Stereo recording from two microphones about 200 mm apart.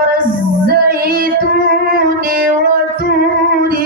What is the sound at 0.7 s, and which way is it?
Music, 45° right (ahead or behind).